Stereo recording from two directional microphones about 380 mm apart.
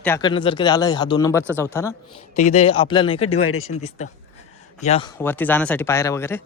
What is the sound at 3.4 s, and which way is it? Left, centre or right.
Speech, left.